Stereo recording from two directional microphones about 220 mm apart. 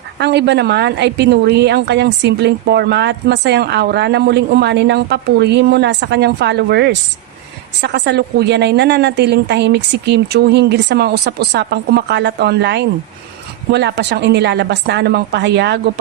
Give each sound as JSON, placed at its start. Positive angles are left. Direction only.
{"t": 0.2, "sound": "a woman's voice", "side_deg": -50}